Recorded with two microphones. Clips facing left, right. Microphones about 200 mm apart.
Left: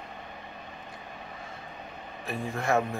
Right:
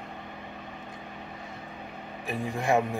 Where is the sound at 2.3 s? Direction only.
15° right (ahead or behind).